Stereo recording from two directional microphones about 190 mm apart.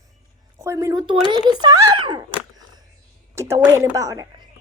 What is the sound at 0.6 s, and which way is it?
Speech, 15° right (ahead or behind).